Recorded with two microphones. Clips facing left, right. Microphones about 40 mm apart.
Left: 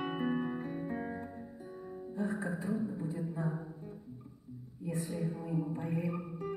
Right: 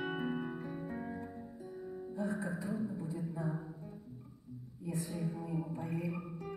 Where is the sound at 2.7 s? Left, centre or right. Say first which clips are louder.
Left 3 dB; centre.